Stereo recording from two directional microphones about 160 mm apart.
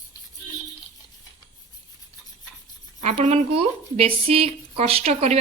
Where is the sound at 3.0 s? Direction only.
45° right (ahead or behind).